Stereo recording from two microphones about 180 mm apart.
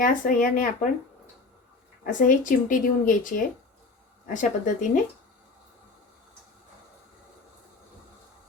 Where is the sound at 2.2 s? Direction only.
50° left (ahead or behind).